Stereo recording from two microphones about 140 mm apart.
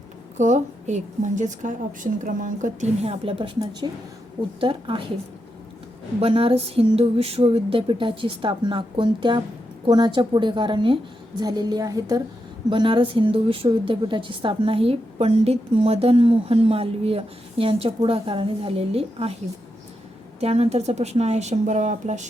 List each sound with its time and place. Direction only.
0.3 s a woman's voice: 60° right (ahead or behind)
3.0 s a sound: 45° right (ahead or behind)
6.1 s a sound: 45° right (ahead or behind)
11.3 s a woman's voice: 30° right (ahead or behind)
12.7 s a woman's voice: 35° right (ahead or behind)
20.4 s a woman's voice: 50° right (ahead or behind)